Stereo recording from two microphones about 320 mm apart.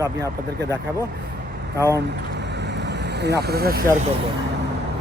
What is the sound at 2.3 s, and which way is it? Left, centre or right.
Vehicle, right.